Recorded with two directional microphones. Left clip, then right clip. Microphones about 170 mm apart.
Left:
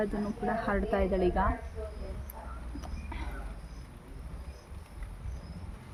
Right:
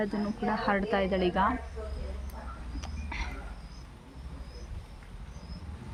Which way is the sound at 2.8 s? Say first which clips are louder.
Right 7 dB; 10° right (ahead or behind).